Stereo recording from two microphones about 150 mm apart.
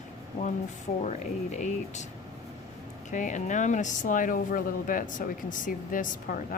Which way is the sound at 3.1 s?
55° left (ahead or behind).